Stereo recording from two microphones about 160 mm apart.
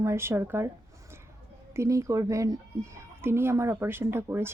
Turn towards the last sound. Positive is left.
turn(degrees=-15)  # may be behind; listen again after turning